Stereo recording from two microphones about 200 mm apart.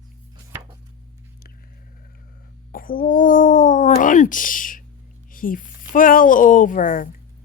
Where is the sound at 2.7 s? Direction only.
45° left (ahead or behind).